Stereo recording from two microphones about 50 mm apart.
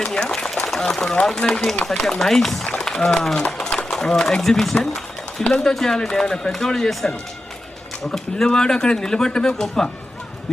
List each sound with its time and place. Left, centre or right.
0.0 s speech: centre
0.3 s a sound: centre
0.7 s speech: centre
2.7 s a sound: centre
3.9 s speech: centre
5.7 s speech: centre